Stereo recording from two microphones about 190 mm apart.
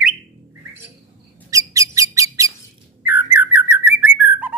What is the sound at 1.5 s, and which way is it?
Squeak, 15° right (ahead or behind).